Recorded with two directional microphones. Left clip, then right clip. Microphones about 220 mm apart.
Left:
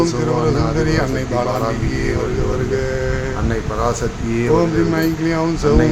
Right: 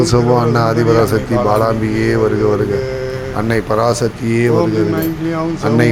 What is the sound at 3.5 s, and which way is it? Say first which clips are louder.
Speech: right 7 dB; 25° right (ahead or behind).